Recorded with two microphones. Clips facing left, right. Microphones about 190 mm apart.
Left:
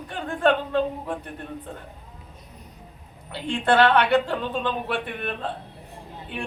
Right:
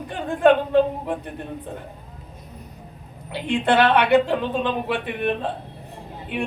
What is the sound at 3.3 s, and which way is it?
A woman's voice, 15° right (ahead or behind).